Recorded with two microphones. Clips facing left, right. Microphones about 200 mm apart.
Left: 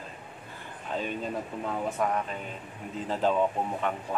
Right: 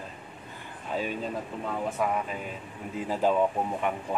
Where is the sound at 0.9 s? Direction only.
5° right (ahead or behind).